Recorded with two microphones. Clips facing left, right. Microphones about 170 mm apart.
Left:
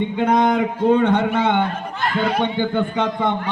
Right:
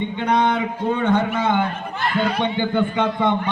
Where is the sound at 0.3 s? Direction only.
45° left (ahead or behind).